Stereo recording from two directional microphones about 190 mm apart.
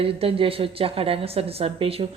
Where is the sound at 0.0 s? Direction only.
30° right (ahead or behind).